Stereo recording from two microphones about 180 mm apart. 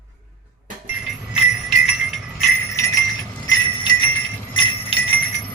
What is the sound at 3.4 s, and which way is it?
Jingle bell, 25° left (ahead or behind).